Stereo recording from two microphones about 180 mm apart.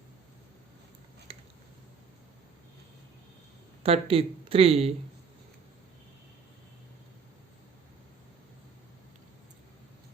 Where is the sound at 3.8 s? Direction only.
30° right (ahead or behind).